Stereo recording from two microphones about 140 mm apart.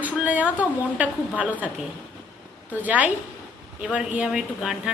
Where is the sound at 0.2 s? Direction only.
10° right (ahead or behind).